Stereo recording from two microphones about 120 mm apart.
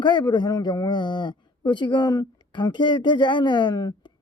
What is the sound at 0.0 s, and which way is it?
Speech, 40° left (ahead or behind).